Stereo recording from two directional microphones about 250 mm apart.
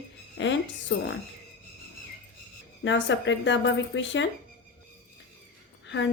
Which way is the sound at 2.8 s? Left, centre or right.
Left.